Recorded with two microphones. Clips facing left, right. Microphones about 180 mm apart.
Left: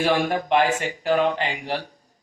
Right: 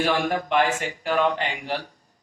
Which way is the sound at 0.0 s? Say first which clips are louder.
Left 2 dB; 35° left (ahead or behind).